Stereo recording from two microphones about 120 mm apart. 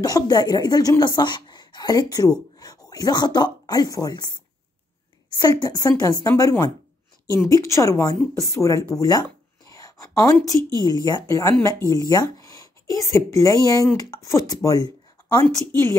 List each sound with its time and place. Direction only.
0.0 s a woman's voice: 30° left (ahead or behind)
5.4 s a woman's voice: 35° left (ahead or behind)